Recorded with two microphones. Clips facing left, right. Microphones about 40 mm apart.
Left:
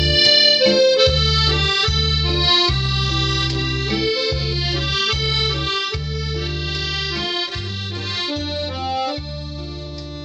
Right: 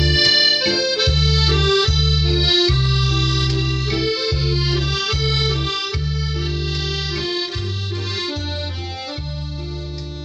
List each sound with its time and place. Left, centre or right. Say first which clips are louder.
0.0 s accordion: left 1 dB; left